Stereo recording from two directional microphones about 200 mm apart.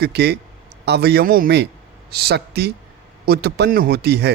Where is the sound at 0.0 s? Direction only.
55° right (ahead or behind).